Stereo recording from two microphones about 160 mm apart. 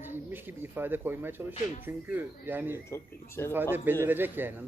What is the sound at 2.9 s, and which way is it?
Speech, 15° left (ahead or behind).